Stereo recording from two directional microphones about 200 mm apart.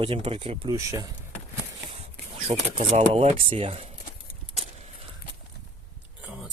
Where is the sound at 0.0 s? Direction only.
30° right (ahead or behind).